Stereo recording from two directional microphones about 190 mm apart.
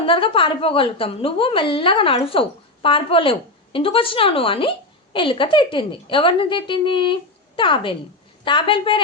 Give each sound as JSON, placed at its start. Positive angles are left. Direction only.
{"t": 0.0, "sound": "a woman's voice", "side_deg": 25}